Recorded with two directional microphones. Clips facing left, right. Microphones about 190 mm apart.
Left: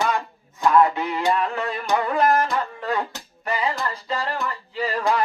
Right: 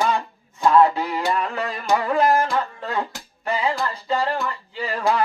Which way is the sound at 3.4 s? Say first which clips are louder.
Right 2 dB; 30° right (ahead or behind).